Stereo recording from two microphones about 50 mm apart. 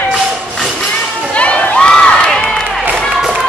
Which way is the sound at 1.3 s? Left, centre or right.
Left.